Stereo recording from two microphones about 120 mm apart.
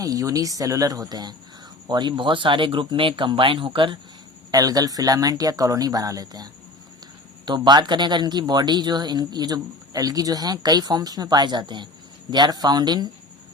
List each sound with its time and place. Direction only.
0.0 s speech: 30° right (ahead or behind); by 3.9 s 45° right (ahead or behind)
4.5 s speech: 30° right (ahead or behind)